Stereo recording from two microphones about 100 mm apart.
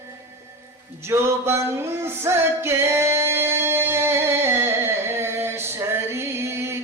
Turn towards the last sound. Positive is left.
turn(degrees=-25)  # may be behind; listen again after turning